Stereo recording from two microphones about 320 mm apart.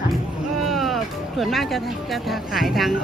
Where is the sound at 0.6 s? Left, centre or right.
Centre.